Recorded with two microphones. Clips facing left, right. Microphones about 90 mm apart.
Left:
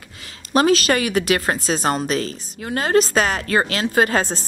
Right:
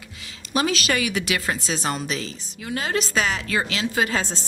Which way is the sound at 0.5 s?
40° left (ahead or behind).